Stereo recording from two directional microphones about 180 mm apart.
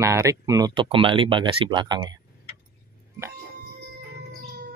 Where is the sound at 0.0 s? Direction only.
15° right (ahead or behind).